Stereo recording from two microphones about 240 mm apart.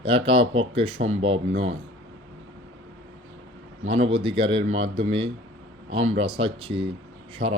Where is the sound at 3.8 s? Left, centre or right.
Right.